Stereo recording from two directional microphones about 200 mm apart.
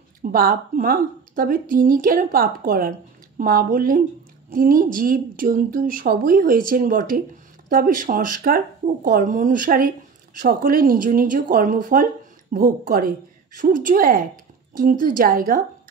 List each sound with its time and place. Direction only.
0.2 s speech: 45° right (ahead or behind)